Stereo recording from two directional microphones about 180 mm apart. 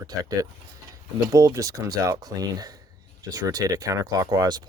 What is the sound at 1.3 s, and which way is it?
Speech, 20° right (ahead or behind).